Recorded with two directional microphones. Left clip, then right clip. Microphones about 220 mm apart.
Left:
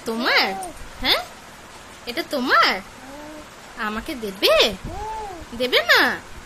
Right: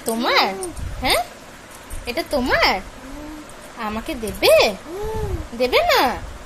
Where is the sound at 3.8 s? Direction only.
5° left (ahead or behind).